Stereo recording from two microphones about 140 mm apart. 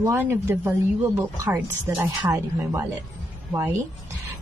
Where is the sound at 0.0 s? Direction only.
15° right (ahead or behind).